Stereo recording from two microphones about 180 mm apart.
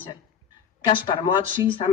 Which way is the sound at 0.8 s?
25° left (ahead or behind).